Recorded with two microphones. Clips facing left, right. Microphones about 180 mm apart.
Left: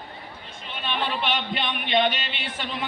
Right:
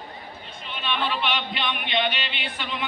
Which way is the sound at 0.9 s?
45° left (ahead or behind).